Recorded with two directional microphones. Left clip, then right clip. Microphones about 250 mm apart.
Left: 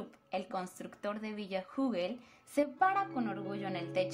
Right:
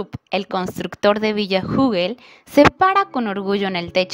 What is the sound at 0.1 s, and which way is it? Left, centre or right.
A woman's voice, right.